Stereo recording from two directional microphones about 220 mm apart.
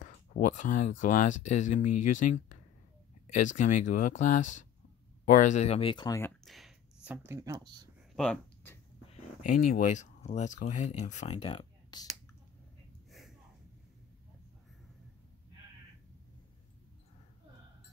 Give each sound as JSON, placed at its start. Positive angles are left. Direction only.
{"t": 0.0, "sound": "speech", "side_deg": 35}
{"t": 6.4, "sound": "a sound", "side_deg": 0}
{"t": 7.1, "sound": "speech", "side_deg": -10}
{"t": 8.2, "sound": "speech", "side_deg": 5}
{"t": 9.5, "sound": "speech", "side_deg": 35}
{"t": 13.1, "sound": "a sound", "side_deg": 0}